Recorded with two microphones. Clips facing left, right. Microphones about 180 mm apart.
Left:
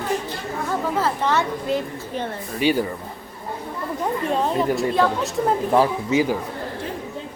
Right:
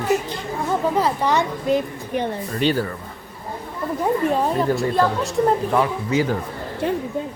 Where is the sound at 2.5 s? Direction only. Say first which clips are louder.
Left 1 dB; 10° left (ahead or behind).